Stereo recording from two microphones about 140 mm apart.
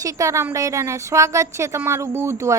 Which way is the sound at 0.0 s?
25° right (ahead or behind).